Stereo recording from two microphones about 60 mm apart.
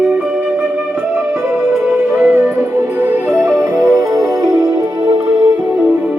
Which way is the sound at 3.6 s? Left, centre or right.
Right.